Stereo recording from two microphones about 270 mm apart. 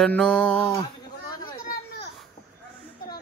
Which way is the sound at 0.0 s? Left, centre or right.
Centre.